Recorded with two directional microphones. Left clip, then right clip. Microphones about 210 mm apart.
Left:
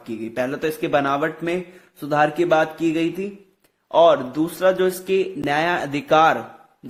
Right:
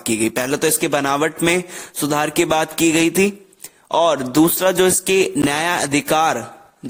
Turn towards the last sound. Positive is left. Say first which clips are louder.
# even
turn(degrees=-40)  # may be behind; listen again after turning